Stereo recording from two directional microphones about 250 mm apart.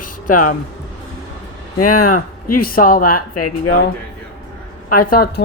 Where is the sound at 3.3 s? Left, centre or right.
Left.